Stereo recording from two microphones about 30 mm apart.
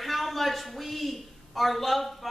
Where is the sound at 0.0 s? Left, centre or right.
Centre.